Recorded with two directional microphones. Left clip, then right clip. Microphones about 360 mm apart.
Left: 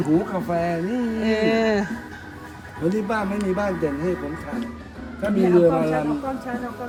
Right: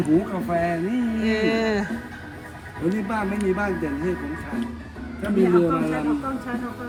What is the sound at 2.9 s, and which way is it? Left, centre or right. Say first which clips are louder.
Speech: left 3 dB; centre.